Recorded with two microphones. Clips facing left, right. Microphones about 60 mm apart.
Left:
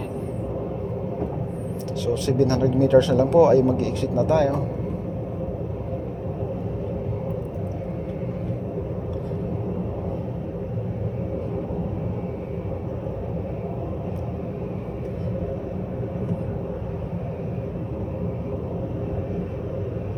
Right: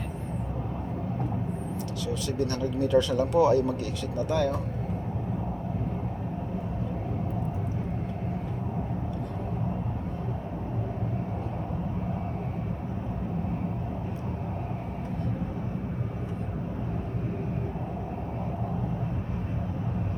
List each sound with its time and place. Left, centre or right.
2.2 s speech: left